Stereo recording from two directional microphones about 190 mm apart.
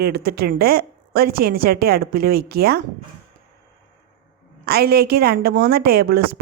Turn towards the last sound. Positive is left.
turn(degrees=-50)  # may be behind; listen again after turning